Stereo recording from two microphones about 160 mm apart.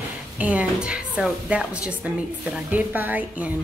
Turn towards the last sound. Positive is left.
turn(degrees=-10)  # may be behind; listen again after turning